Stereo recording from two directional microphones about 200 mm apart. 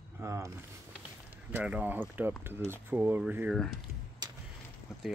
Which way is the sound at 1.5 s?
10° right (ahead or behind).